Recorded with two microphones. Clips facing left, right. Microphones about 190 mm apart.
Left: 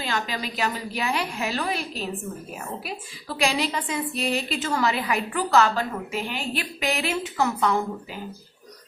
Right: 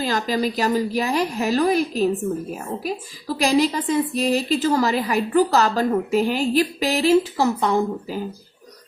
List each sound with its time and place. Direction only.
0.0 s a woman's voice: 40° right (ahead or behind)